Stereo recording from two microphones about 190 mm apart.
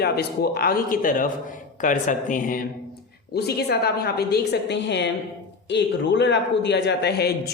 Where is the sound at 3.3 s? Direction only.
60° left (ahead or behind).